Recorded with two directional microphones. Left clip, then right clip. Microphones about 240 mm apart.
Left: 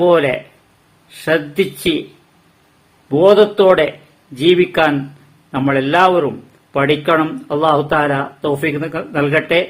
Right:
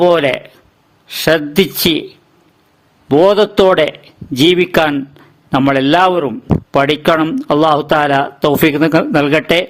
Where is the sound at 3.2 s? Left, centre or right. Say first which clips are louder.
Left 2 dB; right.